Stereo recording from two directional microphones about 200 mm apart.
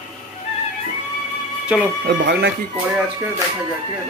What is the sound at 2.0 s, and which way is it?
Speech, 60° right (ahead or behind).